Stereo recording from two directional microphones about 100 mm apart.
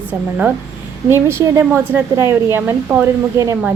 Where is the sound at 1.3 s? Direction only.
25° right (ahead or behind).